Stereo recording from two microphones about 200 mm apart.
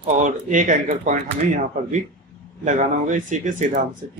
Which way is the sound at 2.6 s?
40° right (ahead or behind).